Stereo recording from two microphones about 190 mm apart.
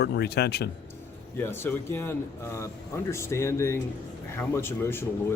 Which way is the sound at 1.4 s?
10° left (ahead or behind).